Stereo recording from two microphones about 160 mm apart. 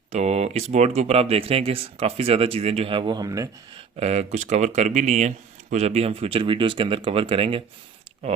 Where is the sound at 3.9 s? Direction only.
45° right (ahead or behind).